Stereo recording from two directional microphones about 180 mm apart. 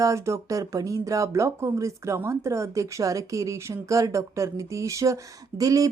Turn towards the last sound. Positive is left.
turn(degrees=-20)  # may be behind; listen again after turning